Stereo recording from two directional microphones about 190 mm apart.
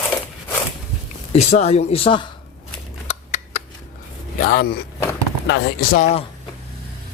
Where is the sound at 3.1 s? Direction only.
35° left (ahead or behind).